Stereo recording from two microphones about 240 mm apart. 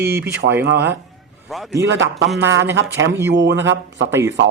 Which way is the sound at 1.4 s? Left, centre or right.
Centre.